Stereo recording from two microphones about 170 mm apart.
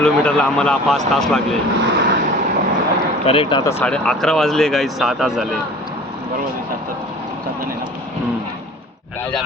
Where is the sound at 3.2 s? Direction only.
35° left (ahead or behind).